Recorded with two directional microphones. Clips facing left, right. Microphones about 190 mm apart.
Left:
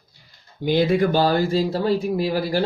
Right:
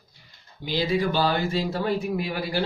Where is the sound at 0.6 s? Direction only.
55° left (ahead or behind); by 2.6 s 40° left (ahead or behind).